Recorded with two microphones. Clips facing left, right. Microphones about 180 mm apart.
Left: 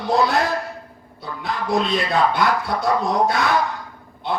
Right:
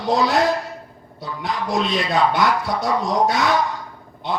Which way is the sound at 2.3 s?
60° left (ahead or behind).